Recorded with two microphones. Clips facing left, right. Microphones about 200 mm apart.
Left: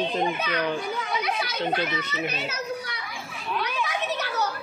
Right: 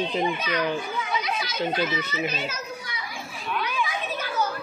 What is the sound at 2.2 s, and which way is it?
Children playing, 65° left (ahead or behind).